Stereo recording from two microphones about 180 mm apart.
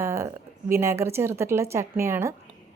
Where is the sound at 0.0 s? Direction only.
15° right (ahead or behind).